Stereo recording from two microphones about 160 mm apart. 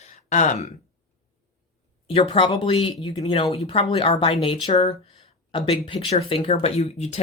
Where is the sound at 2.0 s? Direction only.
40° left (ahead or behind).